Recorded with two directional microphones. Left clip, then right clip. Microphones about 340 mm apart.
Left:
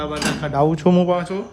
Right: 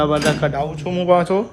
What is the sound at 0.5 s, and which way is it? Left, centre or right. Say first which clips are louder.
Speech: left 6 dB; left.